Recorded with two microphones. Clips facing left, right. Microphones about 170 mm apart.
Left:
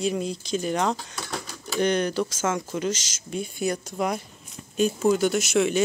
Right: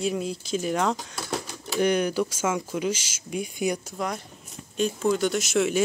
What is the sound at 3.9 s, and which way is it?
Speech, 10° left (ahead or behind).